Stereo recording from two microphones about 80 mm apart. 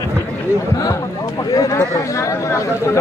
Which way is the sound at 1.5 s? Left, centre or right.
Left.